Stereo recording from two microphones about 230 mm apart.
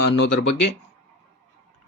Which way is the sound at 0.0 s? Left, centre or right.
Left.